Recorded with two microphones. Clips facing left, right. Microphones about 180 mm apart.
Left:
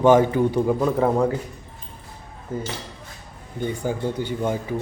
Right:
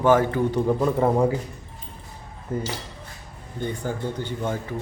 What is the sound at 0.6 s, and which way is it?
Speech, centre (ahead or behind).